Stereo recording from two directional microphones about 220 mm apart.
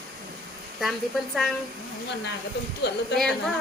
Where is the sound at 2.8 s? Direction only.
50° left (ahead or behind).